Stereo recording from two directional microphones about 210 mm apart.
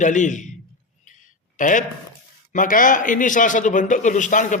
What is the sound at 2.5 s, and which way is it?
A man's voice, 40° left (ahead or behind).